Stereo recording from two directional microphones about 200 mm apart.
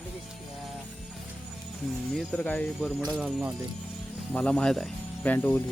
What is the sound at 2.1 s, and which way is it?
Speech, 5° left (ahead or behind).